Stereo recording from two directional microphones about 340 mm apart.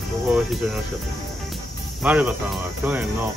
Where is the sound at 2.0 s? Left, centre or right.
Centre.